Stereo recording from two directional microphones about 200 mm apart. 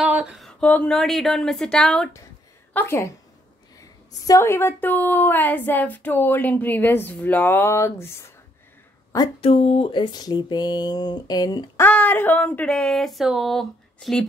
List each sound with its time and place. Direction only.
0.0 s speech: 5° right (ahead or behind); by 8.1 s 15° left (ahead or behind)
9.1 s speech: 25° left (ahead or behind); by 14.2 s centre (ahead or behind)